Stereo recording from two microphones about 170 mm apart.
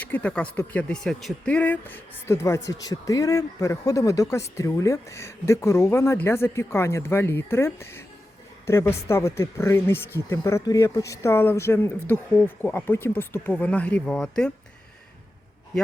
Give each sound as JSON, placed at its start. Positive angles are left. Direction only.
{"t": 0.0, "sound": "speech", "side_deg": 10}